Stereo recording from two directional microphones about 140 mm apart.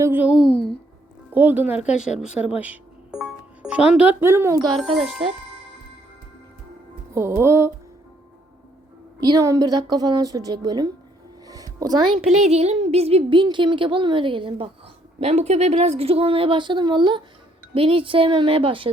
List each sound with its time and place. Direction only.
0.0 s speech: 15° right (ahead or behind)
0.3 s a woman's voice: 5° left (ahead or behind)
1.3 s speech: 15° right (ahead or behind)
7.1 s a woman's voice: 20° right (ahead or behind)
9.2 s a woman's voice: 25° right (ahead or behind)
11.4 s music: 25° right (ahead or behind)
12.3 s speech: 50° right (ahead or behind)
15.2 s a woman's voice: 50° right (ahead or behind)